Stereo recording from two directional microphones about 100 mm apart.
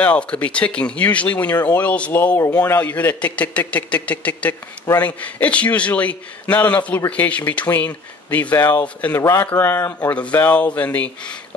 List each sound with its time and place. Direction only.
0.0 s speech: 10° left (ahead or behind)
9.2 s speech: 30° left (ahead or behind); by 11.3 s 15° left (ahead or behind)